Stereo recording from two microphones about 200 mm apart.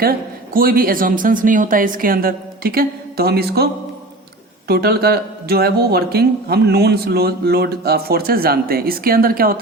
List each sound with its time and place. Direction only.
0.0 s speech: 50° right (ahead or behind)
4.7 s speech: 50° right (ahead or behind)